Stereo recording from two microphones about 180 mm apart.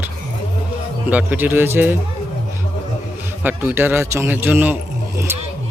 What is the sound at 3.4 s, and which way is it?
A man's voice, 10° right (ahead or behind).